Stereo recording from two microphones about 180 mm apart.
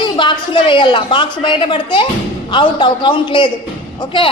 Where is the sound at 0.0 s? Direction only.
25° left (ahead or behind).